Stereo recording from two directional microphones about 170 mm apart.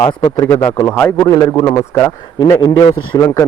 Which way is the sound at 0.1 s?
25° left (ahead or behind).